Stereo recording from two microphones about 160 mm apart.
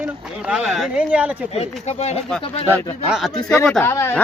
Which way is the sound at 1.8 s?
45° left (ahead or behind).